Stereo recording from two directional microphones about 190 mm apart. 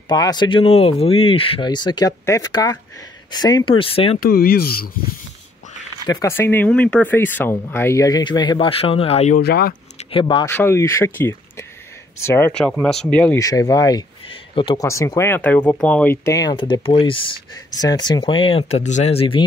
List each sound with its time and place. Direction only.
0.1 s speech: 20° left (ahead or behind)
4.2 s speech: 50° left (ahead or behind)
6.0 s speech: 20° left (ahead or behind); by 9.4 s 35° left (ahead or behind)
9.4 s speech: 55° left (ahead or behind)
9.9 s speech: 25° left (ahead or behind)
10.5 s speech: 15° left (ahead or behind); by 19.4 s 30° left (ahead or behind)